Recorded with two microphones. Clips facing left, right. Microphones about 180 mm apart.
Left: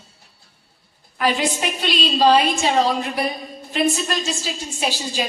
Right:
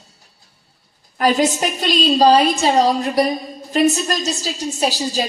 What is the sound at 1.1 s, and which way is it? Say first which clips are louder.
A woman's voice: right 5 dB; 40° right (ahead or behind).